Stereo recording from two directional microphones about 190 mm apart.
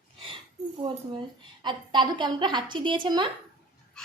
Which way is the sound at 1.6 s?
25° right (ahead or behind).